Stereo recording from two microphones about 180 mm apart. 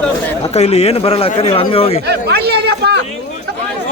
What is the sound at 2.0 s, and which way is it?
Speech, 65° right (ahead or behind).